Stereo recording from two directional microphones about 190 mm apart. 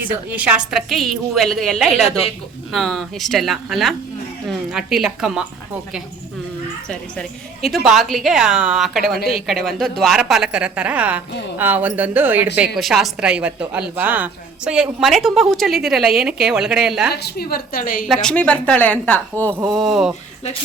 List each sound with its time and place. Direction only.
0.0 s a woman's voice: 10° right (ahead or behind)
6.8 s a woman's voice: 5° left (ahead or behind)
17.1 s a woman's voice: 55° left (ahead or behind)
18.1 s a woman's voice: 5° left (ahead or behind)